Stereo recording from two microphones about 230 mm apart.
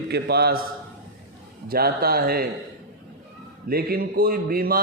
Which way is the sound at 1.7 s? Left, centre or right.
Right.